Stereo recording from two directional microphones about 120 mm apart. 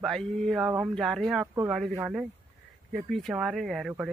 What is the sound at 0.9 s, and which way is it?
Speech, centre (ahead or behind).